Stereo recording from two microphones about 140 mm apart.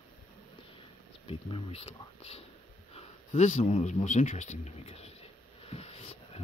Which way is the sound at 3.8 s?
55° left (ahead or behind).